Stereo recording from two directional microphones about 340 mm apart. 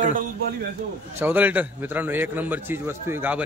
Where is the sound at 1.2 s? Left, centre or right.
Centre.